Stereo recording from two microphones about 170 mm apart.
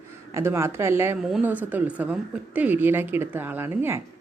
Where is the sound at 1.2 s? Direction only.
5° right (ahead or behind).